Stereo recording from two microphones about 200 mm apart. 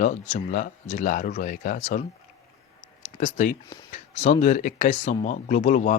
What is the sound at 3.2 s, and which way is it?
Speech, 40° left (ahead or behind).